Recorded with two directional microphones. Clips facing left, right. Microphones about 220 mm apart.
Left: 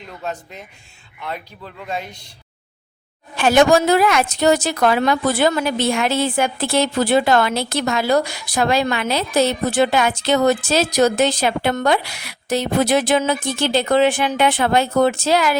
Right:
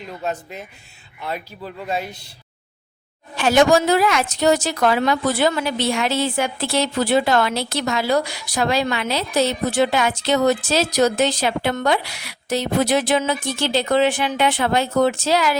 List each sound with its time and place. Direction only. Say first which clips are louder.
0.2 s a man's voice: right 2 dB; 5° right (ahead or behind)
3.3 s a woman's voice: left 1 dB; 55° left (ahead or behind)